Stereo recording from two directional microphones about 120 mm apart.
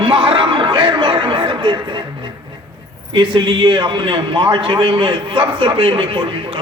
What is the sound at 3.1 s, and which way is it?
A man's voice, 40° right (ahead or behind).